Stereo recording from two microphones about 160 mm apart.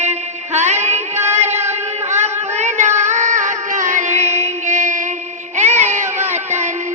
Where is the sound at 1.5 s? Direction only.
15° right (ahead or behind).